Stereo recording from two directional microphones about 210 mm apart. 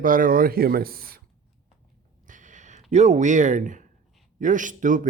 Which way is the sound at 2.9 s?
35° right (ahead or behind).